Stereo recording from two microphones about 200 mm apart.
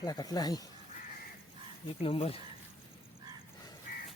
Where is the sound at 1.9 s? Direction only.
30° left (ahead or behind).